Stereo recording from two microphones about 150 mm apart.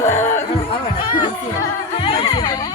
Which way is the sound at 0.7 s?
35° left (ahead or behind).